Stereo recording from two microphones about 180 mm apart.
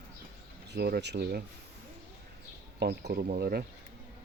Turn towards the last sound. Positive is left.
turn(degrees=-60)  # may be behind; listen again after turning